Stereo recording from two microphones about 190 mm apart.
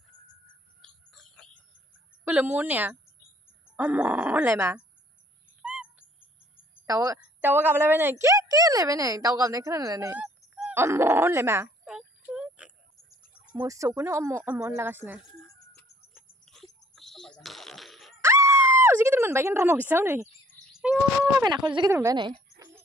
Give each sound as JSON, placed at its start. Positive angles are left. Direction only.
{"t": 0.8, "sound": "bird", "side_deg": 0}
{"t": 2.2, "sound": "a woman's voice", "side_deg": -5}
{"t": 5.6, "sound": "owl", "side_deg": -5}
{"t": 6.9, "sound": "a woman's voice", "side_deg": -15}
{"t": 10.1, "sound": "speech", "side_deg": -5}
{"t": 12.3, "sound": "music", "side_deg": -5}
{"t": 13.1, "sound": "cricket", "side_deg": 50}
{"t": 13.6, "sound": "a woman's voice", "side_deg": -15}
{"t": 16.1, "sound": "fart", "side_deg": 0}
{"t": 18.2, "sound": "a sound", "side_deg": -15}
{"t": 19.9, "sound": "a woman's voice", "side_deg": -10}
{"t": 20.9, "sound": "bird", "side_deg": -5}
{"t": 21.5, "sound": "speech", "side_deg": -25}